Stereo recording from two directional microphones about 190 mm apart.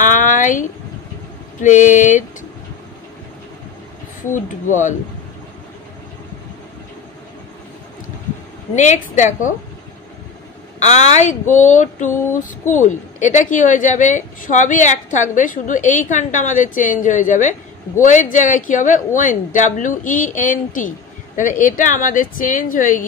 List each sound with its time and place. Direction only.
0.0 s a sound: 45° left (ahead or behind)
1.6 s speech: 40° left (ahead or behind)
4.3 s speech: 40° left (ahead or behind)
8.7 s speech: 40° left (ahead or behind)
10.8 s speech: 35° left (ahead or behind)